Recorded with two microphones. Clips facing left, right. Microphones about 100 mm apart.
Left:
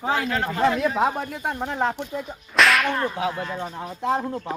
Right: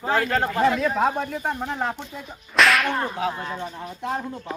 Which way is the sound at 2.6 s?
Centre (ahead or behind).